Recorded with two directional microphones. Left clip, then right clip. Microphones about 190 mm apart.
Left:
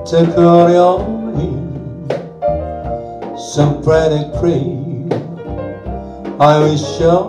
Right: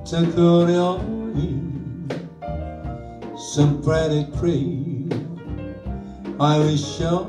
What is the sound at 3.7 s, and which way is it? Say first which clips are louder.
Music: left 9 dB; 20° left (ahead or behind).